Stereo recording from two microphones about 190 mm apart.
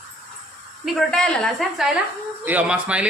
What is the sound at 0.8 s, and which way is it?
Speech, 5° left (ahead or behind).